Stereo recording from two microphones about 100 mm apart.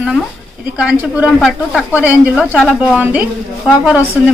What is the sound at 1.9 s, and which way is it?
A woman's voice, 15° right (ahead or behind).